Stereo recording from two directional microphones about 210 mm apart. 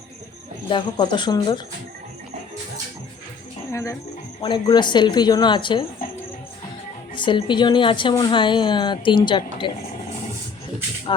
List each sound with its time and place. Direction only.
0.7 s a woman's voice: 20° left (ahead or behind)
3.7 s a woman's voice: 15° left (ahead or behind)
7.2 s a woman's voice: 25° left (ahead or behind)